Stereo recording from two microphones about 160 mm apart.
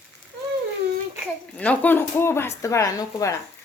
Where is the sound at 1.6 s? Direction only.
10° left (ahead or behind).